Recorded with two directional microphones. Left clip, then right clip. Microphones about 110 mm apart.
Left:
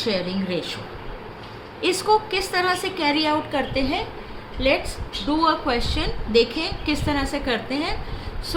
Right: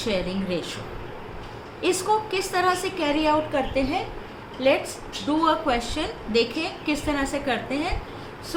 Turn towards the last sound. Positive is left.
turn(degrees=45)  # may be behind; listen again after turning